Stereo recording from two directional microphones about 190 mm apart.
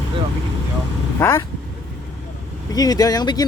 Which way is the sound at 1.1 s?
15° left (ahead or behind).